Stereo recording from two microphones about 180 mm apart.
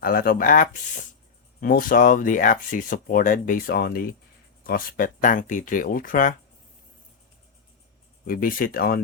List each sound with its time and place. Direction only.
0.0 s speech: 55° left (ahead or behind)
8.2 s speech: 50° left (ahead or behind)